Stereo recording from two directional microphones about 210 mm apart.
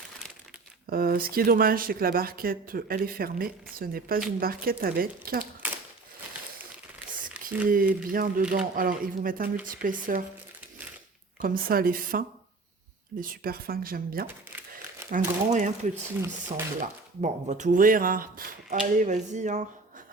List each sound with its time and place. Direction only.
0.9 s speech: 45° right (ahead or behind)
7.7 s speech: 40° right (ahead or behind)
11.3 s speech: 40° right (ahead or behind)
14.3 s crumpling: 10° right (ahead or behind)
15.1 s speech: 35° right (ahead or behind)